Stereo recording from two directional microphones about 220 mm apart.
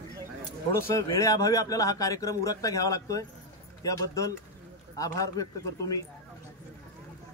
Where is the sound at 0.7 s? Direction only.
15° left (ahead or behind).